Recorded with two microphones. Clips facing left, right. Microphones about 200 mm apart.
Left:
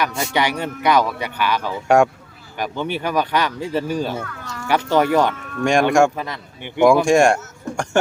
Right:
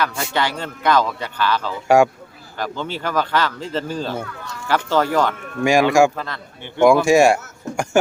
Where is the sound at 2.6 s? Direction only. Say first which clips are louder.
Left 2 dB; 15° left (ahead or behind).